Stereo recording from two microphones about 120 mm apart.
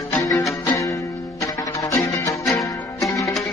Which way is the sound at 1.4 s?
25° left (ahead or behind).